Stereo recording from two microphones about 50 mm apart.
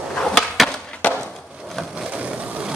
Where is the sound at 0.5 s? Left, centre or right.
Centre.